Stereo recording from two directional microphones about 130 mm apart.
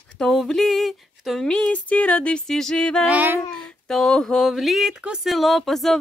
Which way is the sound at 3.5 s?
5° left (ahead or behind).